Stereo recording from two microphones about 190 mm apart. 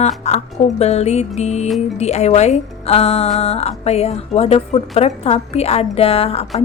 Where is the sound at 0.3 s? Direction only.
35° left (ahead or behind).